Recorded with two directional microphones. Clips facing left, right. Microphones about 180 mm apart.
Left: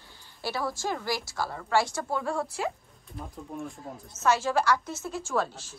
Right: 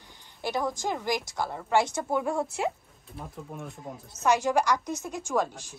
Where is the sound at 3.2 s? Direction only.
Centre (ahead or behind).